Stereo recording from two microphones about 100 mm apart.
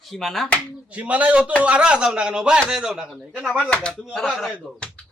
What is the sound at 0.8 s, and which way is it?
Speech, 15° right (ahead or behind).